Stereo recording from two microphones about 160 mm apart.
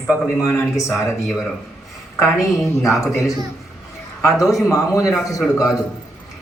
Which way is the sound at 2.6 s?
20° left (ahead or behind).